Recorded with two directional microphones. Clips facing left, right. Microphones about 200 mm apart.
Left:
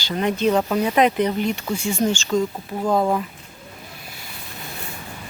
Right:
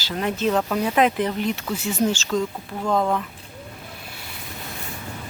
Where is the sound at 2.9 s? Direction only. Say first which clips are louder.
Left 2 dB; 25° left (ahead or behind).